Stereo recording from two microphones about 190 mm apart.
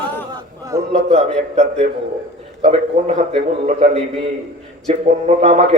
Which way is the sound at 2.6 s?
40° right (ahead or behind).